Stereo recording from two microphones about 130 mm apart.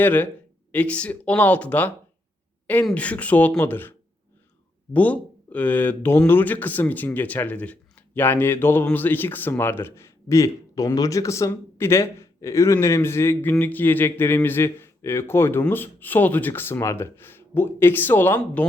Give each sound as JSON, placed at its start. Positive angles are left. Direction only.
{"t": 0.0, "sound": "speech", "side_deg": 15}
{"t": 4.9, "sound": "speech", "side_deg": 10}